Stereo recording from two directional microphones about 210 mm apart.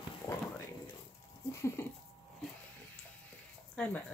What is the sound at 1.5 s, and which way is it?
Speech, 15° left (ahead or behind).